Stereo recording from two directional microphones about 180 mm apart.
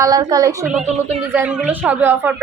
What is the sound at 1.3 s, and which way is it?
A woman's voice, 5° right (ahead or behind).